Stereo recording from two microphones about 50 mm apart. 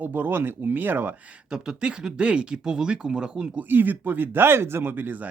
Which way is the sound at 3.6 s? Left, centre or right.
Right.